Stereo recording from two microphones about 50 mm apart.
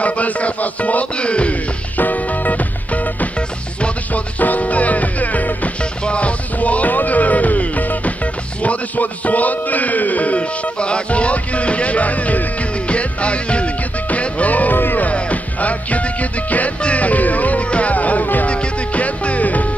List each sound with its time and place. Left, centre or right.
0.0 s music: left
2.0 s music: left
15.0 s music: left